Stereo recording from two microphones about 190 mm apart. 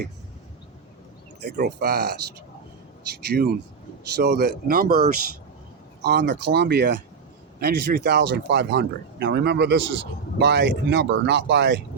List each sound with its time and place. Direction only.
1.6 s speech: 55° right (ahead or behind)
3.2 s speech: 55° right (ahead or behind)